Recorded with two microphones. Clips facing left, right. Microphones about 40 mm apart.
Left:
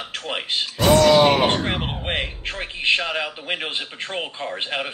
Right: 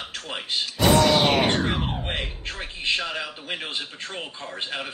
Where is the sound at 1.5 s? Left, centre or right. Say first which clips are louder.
Left 1 dB; left.